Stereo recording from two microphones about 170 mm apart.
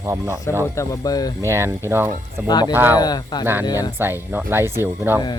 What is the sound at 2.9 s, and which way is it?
Speech, 25° left (ahead or behind).